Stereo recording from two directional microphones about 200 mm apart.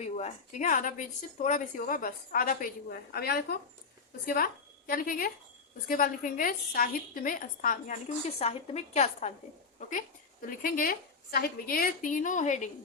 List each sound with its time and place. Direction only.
0.0 s a woman's voice: 35° left (ahead or behind); by 3.6 s 50° left (ahead or behind)
4.9 s a woman's voice: 45° left (ahead or behind)
8.4 s a woman's voice: 30° left (ahead or behind)
10.4 s a woman's voice: 45° left (ahead or behind)